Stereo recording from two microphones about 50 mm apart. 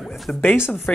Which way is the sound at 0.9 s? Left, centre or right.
Left.